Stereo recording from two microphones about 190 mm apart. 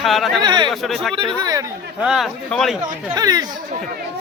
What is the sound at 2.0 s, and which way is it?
Speech, centre (ahead or behind).